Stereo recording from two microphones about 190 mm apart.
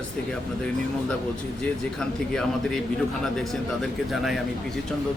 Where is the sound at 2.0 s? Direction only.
5° left (ahead or behind).